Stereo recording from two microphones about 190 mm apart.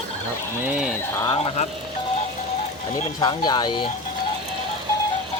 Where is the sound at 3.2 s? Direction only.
25° left (ahead or behind).